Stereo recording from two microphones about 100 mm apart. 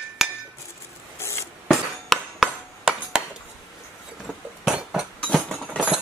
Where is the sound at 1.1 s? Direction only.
25° left (ahead or behind).